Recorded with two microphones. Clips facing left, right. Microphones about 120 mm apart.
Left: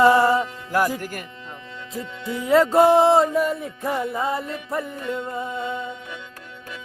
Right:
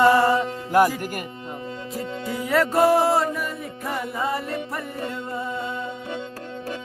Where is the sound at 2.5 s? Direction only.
25° left (ahead or behind).